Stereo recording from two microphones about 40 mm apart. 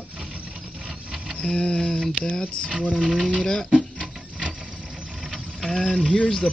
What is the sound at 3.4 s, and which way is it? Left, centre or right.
Speech, centre.